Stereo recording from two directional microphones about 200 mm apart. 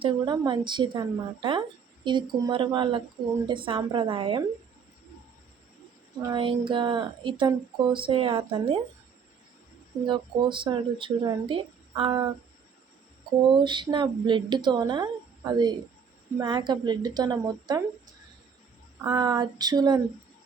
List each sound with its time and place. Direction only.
0.0 s speech: 20° right (ahead or behind)
6.2 s speech: 25° right (ahead or behind)
10.1 s speech: 25° right (ahead or behind)
13.5 s speech: 25° right (ahead or behind)
19.0 s speech: 20° right (ahead or behind)